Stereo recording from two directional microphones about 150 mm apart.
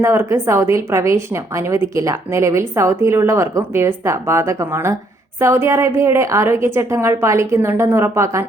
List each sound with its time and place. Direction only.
0.0 s a woman's voice: 15° right (ahead or behind)